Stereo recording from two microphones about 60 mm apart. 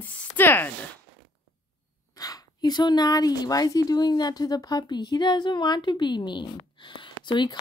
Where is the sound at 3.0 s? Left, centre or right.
Left.